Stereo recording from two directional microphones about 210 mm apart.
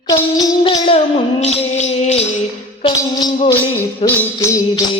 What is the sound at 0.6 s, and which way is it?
Music, 25° left (ahead or behind).